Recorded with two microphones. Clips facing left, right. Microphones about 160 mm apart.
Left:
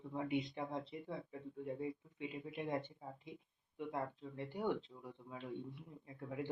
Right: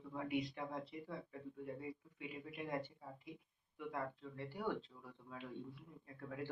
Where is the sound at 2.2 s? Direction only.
25° left (ahead or behind).